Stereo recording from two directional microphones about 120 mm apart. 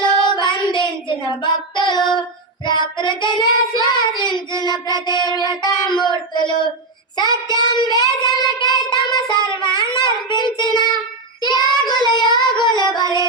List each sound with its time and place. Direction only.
0.2 s child singing: 40° left (ahead or behind)
12.6 s music: 35° left (ahead or behind)